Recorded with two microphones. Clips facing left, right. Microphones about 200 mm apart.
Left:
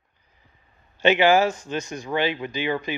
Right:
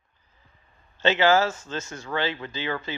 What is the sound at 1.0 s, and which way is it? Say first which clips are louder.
Speech: left 3 dB; 15° left (ahead or behind).